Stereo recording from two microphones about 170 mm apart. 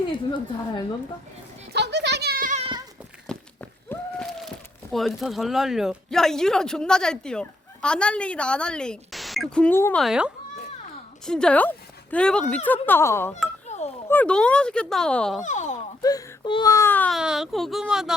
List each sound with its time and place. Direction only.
1.7 s a sound: 80° right; by 2.6 s 60° right (ahead or behind)
2.6 s goat: 30° right (ahead or behind)
3.3 s walk: 5° left (ahead or behind)
3.8 s speech: 5° left (ahead or behind)
10.0 s speech: 5° right (ahead or behind); by 13.3 s 15° left (ahead or behind)
13.7 s chink: 40° left (ahead or behind)
14.1 s speech: 10° left (ahead or behind)
15.4 s a sound: 45° left (ahead or behind)
16.0 s speech: 20° left (ahead or behind)
17.2 s speech: 5° right (ahead or behind)